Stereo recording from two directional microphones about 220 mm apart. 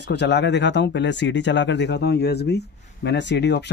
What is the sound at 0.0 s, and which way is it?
Speech, 50° left (ahead or behind).